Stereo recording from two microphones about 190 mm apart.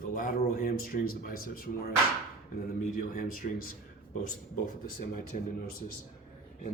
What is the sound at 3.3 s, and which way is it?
Speech, 45° left (ahead or behind).